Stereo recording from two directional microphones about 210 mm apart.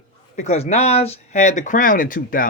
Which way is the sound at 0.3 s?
30° left (ahead or behind).